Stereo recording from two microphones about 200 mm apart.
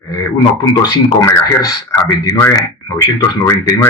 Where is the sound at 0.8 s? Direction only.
20° left (ahead or behind).